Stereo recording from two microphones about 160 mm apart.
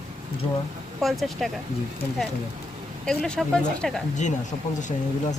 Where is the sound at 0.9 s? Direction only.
Centre (ahead or behind).